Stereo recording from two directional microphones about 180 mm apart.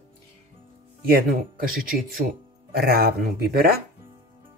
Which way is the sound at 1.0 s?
55° right (ahead or behind).